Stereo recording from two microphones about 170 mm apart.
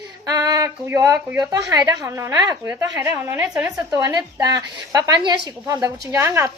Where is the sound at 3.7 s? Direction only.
20° right (ahead or behind).